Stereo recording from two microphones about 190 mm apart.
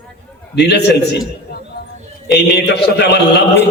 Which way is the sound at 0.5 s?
60° left (ahead or behind).